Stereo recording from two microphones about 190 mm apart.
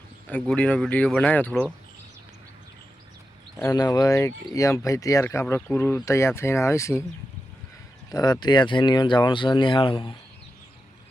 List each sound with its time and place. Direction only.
0.3 s speech: 5° left (ahead or behind)
3.6 s speech: 20° left (ahead or behind)
8.1 s speech: 20° left (ahead or behind)